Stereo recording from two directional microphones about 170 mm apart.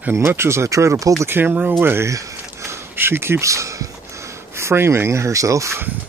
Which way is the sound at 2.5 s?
15° right (ahead or behind).